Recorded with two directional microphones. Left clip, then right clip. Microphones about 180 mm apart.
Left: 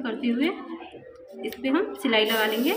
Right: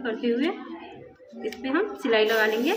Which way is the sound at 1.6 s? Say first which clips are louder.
Left 1 dB; 30° left (ahead or behind).